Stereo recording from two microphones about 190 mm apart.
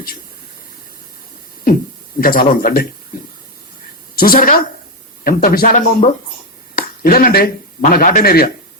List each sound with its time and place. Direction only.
2.2 s speech: 50° left (ahead or behind)
4.1 s a woman's voice: 50° left (ahead or behind)